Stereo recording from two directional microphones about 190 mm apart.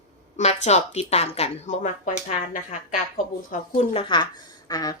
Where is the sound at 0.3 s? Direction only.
35° left (ahead or behind).